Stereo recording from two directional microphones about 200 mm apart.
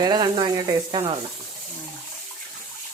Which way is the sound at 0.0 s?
20° right (ahead or behind).